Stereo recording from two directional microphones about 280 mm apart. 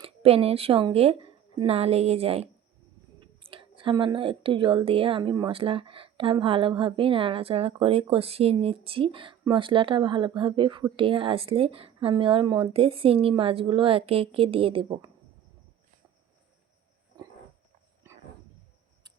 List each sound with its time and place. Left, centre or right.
0.0 s a woman's voice: right